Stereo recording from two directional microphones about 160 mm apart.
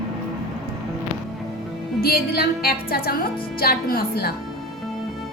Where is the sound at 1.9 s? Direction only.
70° left (ahead or behind).